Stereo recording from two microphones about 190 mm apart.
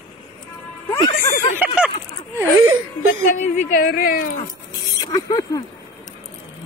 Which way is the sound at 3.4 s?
45° left (ahead or behind).